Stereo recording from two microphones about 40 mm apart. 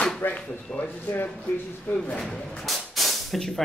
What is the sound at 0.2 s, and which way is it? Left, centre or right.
Speech, left.